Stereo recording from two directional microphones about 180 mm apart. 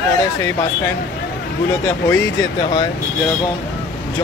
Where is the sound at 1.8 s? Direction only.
15° left (ahead or behind).